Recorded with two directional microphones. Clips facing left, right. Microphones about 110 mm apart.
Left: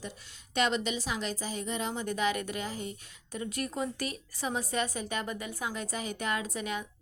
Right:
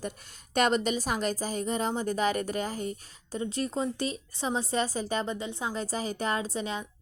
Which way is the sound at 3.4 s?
25° right (ahead or behind).